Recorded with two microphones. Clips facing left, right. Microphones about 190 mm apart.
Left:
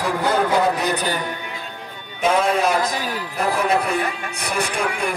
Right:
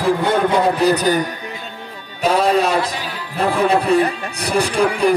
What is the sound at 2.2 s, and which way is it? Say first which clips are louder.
Speech: right 3 dB; 35° right (ahead or behind).